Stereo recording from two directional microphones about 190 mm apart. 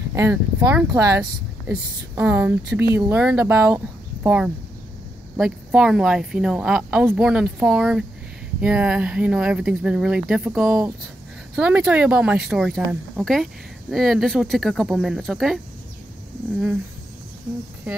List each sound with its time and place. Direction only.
0.1 s speech: 15° right (ahead or behind); by 15.6 s centre (ahead or behind)